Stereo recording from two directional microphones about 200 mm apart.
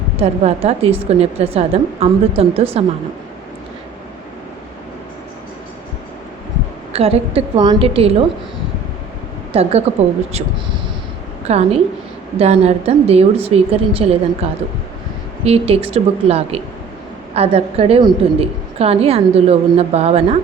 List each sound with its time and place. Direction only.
0.2 s a woman's voice: 30° right (ahead or behind)
6.9 s speech: 30° right (ahead or behind)
9.5 s a woman's voice: 30° right (ahead or behind)
11.4 s a woman's voice: 30° right (ahead or behind)